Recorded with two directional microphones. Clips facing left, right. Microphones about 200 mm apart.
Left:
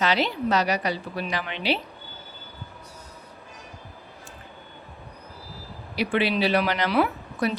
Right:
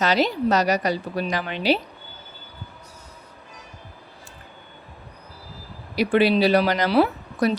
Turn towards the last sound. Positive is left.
turn(degrees=-35)  # may be behind; listen again after turning